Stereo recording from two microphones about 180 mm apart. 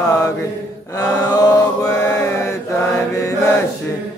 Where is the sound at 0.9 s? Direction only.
20° left (ahead or behind).